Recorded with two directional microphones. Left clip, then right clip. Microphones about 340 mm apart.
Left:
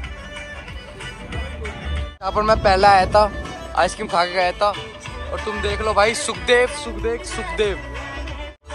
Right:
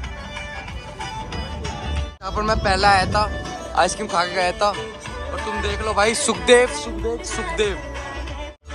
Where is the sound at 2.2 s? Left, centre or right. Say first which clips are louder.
Left 5 dB; centre.